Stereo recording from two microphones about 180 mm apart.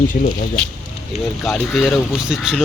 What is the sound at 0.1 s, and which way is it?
Speech, 50° left (ahead or behind).